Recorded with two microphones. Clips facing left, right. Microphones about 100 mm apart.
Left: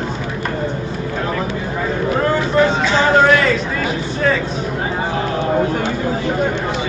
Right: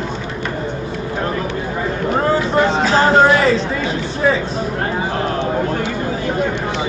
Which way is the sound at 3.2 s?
30° right (ahead or behind).